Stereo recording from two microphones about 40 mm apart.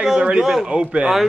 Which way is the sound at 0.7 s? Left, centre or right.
Right.